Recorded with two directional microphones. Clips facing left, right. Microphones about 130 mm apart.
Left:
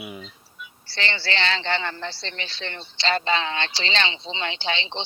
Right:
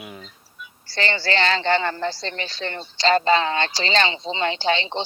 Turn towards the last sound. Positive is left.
turn(degrees=-45)  # may be behind; listen again after turning